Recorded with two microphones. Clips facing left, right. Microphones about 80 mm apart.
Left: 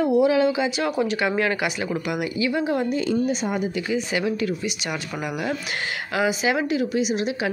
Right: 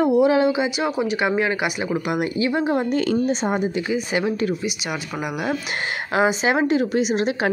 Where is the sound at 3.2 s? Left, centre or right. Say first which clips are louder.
Right 3 dB; right.